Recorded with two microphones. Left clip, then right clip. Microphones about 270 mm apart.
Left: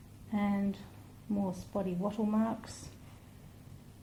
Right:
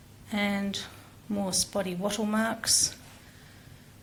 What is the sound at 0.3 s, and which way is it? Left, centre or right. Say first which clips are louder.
Speech: right 5 dB; centre.